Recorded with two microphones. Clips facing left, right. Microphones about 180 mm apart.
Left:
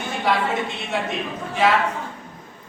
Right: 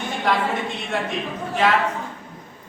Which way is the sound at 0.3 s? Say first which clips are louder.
Even; 5° left (ahead or behind).